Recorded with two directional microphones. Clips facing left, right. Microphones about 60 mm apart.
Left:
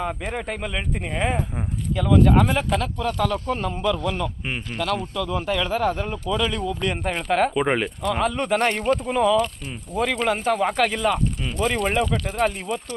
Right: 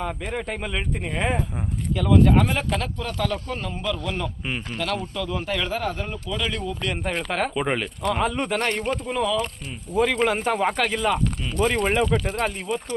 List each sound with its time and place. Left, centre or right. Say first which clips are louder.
0.0 s speech: left 1 dB; centre
3.4 s speech: left 5 dB; left
3.8 s speech: left 4 dB; centre
5.1 s speech: left 3 dB; centre
5.7 s speech: left 4 dB; centre
8.0 s speech: right 2 dB; centre
9.9 s speech: right 2 dB; centre